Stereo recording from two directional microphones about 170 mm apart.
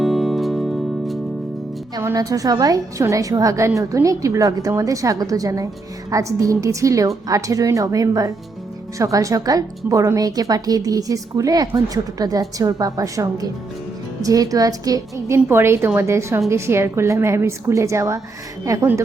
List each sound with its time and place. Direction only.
0.0 s music: centre (ahead or behind)
2.0 s a woman's voice: 15° right (ahead or behind)